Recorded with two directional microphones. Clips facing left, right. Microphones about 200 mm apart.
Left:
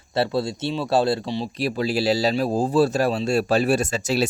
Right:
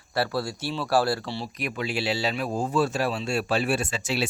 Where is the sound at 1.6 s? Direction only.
35° left (ahead or behind).